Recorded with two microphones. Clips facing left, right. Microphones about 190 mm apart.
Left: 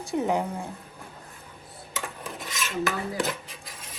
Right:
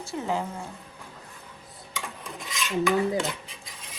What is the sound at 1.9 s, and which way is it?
Filing, centre (ahead or behind).